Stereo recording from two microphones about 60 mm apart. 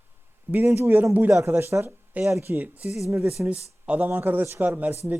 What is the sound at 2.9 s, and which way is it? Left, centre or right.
Speech, centre.